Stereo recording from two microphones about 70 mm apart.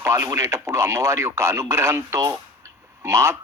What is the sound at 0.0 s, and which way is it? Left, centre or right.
Speech, right.